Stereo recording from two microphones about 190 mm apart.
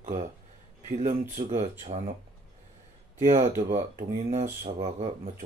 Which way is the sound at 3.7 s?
40° right (ahead or behind).